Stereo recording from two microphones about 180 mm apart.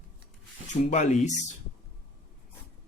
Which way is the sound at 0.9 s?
40° left (ahead or behind).